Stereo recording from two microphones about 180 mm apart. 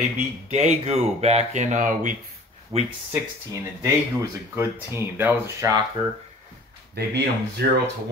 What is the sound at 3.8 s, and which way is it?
Speech, 15° right (ahead or behind).